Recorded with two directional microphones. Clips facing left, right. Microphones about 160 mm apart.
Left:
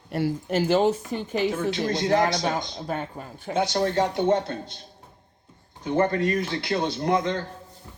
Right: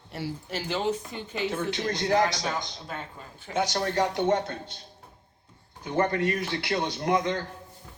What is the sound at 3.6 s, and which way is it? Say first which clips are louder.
Speech: left 3 dB; 15° left (ahead or behind).